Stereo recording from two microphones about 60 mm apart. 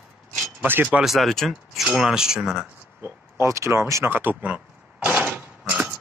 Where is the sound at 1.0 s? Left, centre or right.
Centre.